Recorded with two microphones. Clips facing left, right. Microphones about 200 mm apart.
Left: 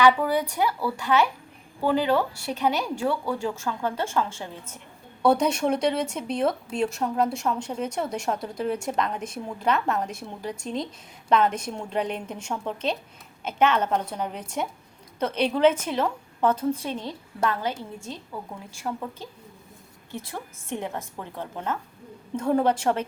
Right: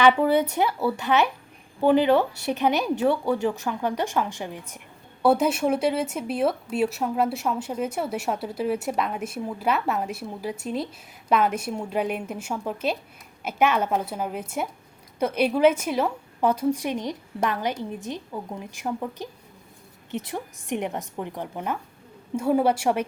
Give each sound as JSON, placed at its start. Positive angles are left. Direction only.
{"t": 0.0, "sound": "a woman's voice", "side_deg": -25}